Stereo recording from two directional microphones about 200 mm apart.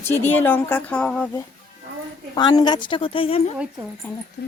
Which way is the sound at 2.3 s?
20° left (ahead or behind).